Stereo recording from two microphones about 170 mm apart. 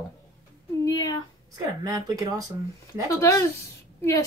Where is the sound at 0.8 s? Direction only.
20° left (ahead or behind).